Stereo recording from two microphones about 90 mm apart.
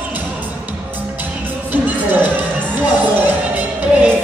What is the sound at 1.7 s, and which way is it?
Music, 20° right (ahead or behind).